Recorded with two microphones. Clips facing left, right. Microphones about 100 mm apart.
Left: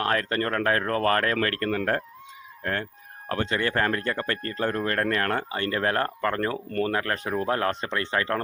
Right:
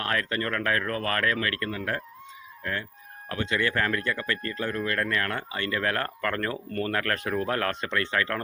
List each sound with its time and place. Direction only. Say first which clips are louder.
0.0 s speech: left 3 dB; 35° left (ahead or behind)
3.2 s speech: left 1 dB; 40° left (ahead or behind)